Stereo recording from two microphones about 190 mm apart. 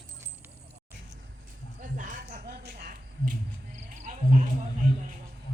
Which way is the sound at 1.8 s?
45° right (ahead or behind).